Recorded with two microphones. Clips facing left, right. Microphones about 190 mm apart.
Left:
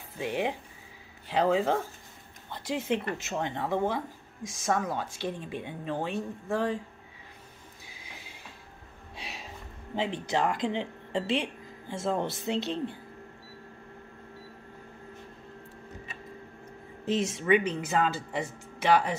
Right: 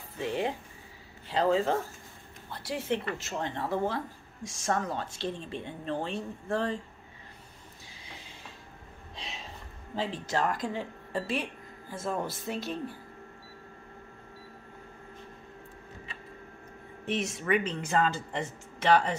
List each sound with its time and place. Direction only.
0.2 s a woman's voice: 10° left (ahead or behind)
9.1 s a sound: 10° left (ahead or behind)
9.9 s speech: 20° left (ahead or behind)
17.0 s speech: 25° left (ahead or behind)
17.6 s a woman's voice: 5° left (ahead or behind)